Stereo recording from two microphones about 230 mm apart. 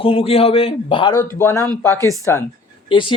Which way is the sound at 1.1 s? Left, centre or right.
Centre.